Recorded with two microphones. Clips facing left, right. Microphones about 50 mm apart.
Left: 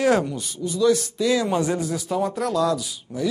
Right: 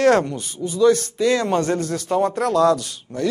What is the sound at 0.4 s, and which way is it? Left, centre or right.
Speech, right.